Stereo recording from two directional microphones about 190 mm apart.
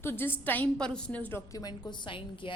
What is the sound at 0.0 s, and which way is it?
A woman's voice, 10° left (ahead or behind).